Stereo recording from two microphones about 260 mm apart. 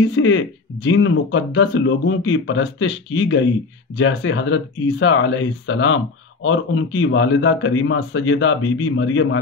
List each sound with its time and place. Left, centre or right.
0.1 s speech: left